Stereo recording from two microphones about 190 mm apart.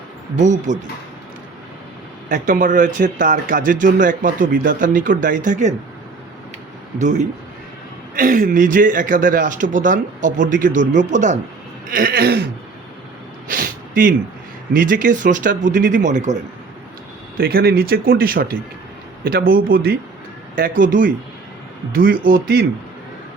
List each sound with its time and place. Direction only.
0.3 s speech: 40° right (ahead or behind)
2.3 s speech: 45° right (ahead or behind)
8.1 s speech: 45° right (ahead or behind)
11.9 s speech: 50° right (ahead or behind)
13.5 s a sound: 45° right (ahead or behind)
14.7 s speech: 45° right (ahead or behind)
17.3 s speech: 55° right (ahead or behind)